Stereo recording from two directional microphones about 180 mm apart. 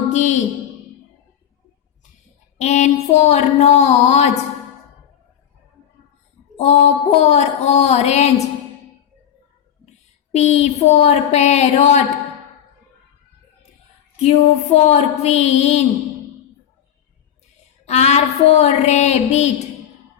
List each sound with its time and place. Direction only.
0.1 s speech: 40° left (ahead or behind)
2.6 s speech: 40° left (ahead or behind)
6.6 s speech: 35° left (ahead or behind)
10.3 s speech: 40° left (ahead or behind)
14.2 s speech: 35° left (ahead or behind)
17.8 s speech: 40° left (ahead or behind)